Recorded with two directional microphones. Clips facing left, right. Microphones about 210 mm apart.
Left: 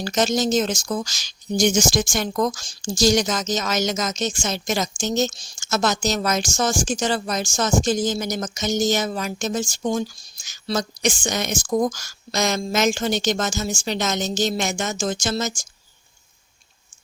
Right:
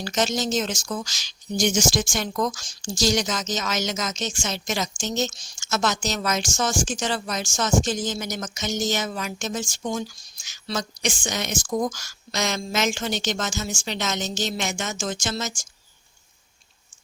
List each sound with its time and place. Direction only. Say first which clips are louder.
0.0 s speech: left 4 dB; 40° left (ahead or behind)